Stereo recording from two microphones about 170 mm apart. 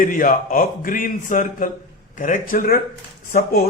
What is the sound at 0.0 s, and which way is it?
A man's voice, 50° left (ahead or behind).